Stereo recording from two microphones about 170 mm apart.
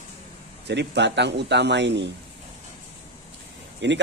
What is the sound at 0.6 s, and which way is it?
Speech, 90° right.